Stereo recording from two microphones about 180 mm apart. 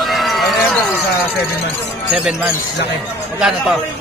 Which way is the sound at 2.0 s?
5° right (ahead or behind).